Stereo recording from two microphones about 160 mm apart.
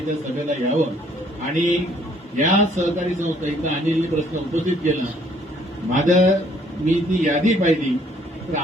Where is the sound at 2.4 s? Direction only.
50° right (ahead or behind).